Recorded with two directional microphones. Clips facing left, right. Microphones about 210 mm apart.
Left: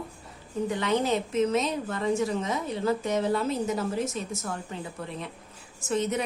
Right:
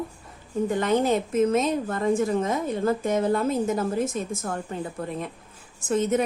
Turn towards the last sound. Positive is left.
turn(degrees=-50)  # may be behind; listen again after turning